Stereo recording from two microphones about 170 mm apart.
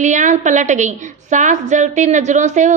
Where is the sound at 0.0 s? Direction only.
45° right (ahead or behind).